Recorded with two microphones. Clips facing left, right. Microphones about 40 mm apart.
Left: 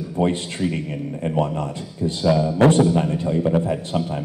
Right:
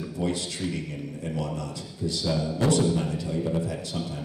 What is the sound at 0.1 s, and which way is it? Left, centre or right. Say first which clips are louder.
A man's voice: left 9 dB; left.